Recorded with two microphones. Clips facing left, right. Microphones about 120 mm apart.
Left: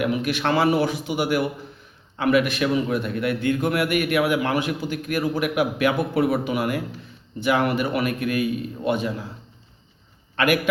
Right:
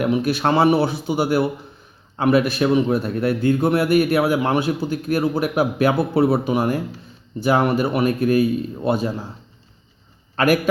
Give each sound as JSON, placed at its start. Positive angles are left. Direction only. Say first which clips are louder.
{"t": 0.0, "sound": "a man's voice", "louder": "right 4 dB", "side_deg": -35}
{"t": 10.3, "sound": "a man's voice", "louder": "right 3 dB", "side_deg": -40}